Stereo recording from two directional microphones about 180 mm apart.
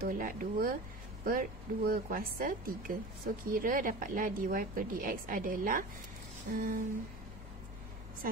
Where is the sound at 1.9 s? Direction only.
55° right (ahead or behind).